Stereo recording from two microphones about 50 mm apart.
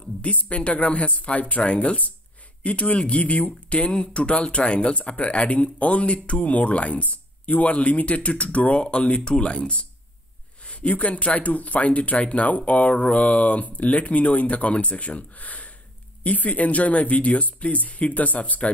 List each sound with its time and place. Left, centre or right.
0.2 s speech: left